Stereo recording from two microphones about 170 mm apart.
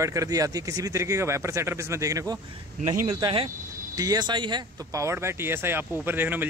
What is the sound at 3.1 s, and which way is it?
Speech, 30° right (ahead or behind).